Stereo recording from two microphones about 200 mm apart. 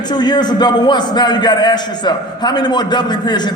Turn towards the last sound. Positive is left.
turn(degrees=20)  # may be behind; listen again after turning